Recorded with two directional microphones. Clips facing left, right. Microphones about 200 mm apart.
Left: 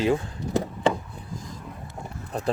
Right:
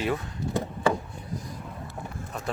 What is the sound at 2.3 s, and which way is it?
Speech, 35° left (ahead or behind).